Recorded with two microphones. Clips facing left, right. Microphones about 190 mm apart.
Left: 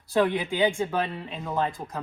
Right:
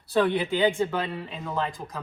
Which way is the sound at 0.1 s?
15° left (ahead or behind).